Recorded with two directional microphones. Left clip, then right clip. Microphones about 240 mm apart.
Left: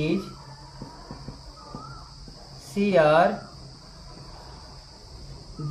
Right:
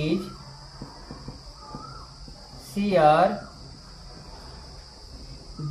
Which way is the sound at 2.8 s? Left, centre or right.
Centre.